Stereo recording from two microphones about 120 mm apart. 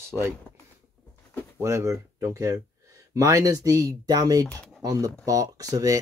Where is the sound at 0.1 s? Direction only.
5° left (ahead or behind).